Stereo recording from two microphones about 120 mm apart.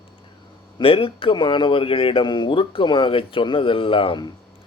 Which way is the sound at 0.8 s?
50° left (ahead or behind).